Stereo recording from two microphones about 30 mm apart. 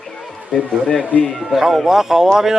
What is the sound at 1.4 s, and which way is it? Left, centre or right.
Speech, centre.